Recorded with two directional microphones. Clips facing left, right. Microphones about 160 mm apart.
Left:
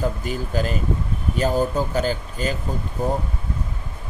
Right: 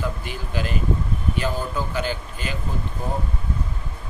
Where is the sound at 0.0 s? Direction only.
40° left (ahead or behind).